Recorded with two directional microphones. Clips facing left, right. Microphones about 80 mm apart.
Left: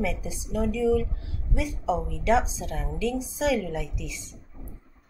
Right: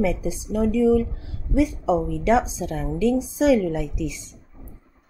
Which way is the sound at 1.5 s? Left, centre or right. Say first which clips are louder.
Right 7 dB; right.